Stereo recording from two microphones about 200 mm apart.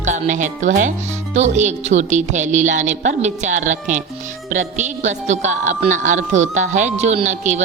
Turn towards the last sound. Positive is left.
turn(degrees=-35)  # may be behind; listen again after turning